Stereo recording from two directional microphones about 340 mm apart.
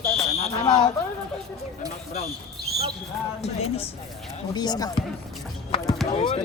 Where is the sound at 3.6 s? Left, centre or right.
Centre.